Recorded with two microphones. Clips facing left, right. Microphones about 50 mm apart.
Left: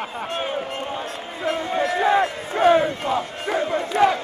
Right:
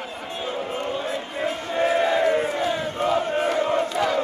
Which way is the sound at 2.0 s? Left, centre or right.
Left.